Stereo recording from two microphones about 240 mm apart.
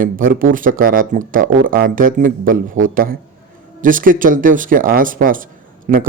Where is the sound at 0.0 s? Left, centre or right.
Right.